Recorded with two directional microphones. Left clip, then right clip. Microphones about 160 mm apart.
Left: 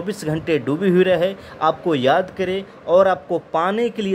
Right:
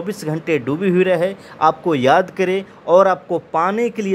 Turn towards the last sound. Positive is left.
turn(degrees=-10)  # may be behind; listen again after turning